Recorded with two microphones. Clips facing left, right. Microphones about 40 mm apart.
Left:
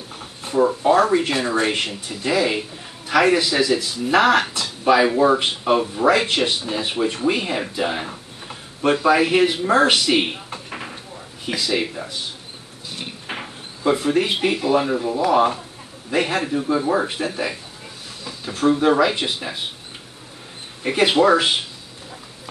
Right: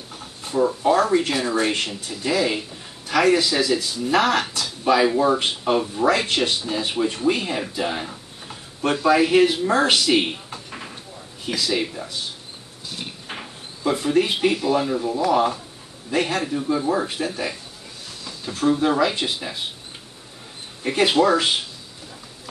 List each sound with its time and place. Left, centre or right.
0.1 s speech: centre
11.4 s speech: centre
20.8 s speech: centre